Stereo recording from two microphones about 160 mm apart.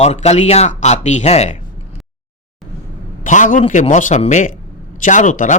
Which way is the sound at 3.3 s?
50° left (ahead or behind).